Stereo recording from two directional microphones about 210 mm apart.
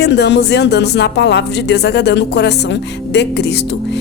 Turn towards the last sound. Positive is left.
turn(degrees=50)  # may be behind; listen again after turning